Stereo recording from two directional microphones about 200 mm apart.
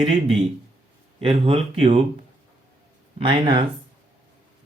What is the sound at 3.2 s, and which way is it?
Speech, 25° right (ahead or behind).